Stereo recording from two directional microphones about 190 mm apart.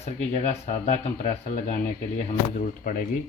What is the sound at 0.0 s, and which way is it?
Speech, 35° left (ahead or behind).